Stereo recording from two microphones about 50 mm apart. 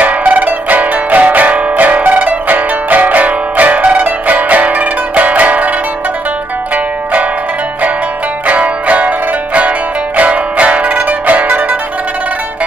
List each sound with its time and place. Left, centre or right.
0.0 s music: right
8.5 s music: right